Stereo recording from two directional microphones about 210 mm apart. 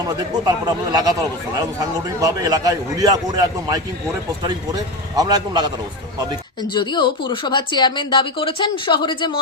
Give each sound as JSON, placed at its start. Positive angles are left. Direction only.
{"t": 0.0, "sound": "a man's voice", "side_deg": -20}
{"t": 6.6, "sound": "a woman's voice", "side_deg": 20}